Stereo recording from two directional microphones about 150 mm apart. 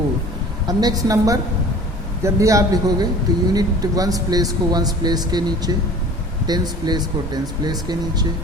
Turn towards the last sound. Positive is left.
turn(degrees=-25)  # may be behind; listen again after turning